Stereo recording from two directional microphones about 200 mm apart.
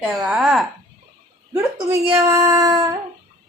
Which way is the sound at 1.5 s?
10° right (ahead or behind).